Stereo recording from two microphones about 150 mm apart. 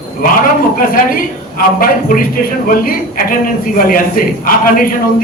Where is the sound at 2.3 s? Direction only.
70° left (ahead or behind).